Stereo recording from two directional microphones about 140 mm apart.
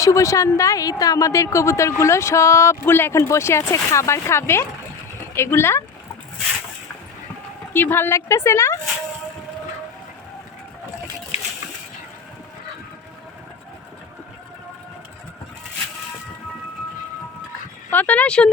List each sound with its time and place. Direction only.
0.0 s a woman's voice: 20° left (ahead or behind)
7.7 s a woman's voice: 15° left (ahead or behind)
17.9 s speech: 10° left (ahead or behind)